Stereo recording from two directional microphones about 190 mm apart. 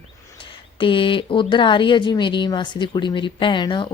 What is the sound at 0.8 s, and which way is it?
Speech, 25° left (ahead or behind).